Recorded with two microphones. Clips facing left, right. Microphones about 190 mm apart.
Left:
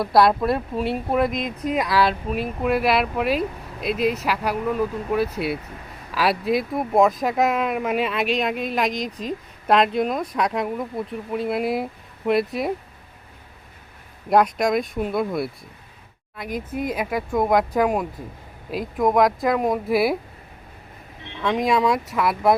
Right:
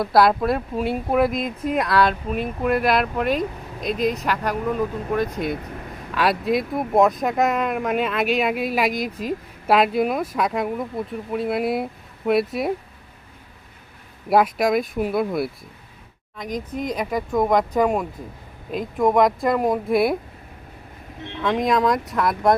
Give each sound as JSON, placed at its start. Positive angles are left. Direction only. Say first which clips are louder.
{"t": 0.0, "sound": "speech", "louder": "even", "side_deg": 0}
{"t": 14.3, "sound": "speech", "louder": "even", "side_deg": -5}
{"t": 21.4, "sound": "speech", "louder": "even", "side_deg": 0}